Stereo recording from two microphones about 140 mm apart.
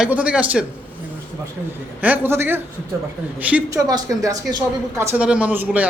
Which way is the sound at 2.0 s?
10° right (ahead or behind).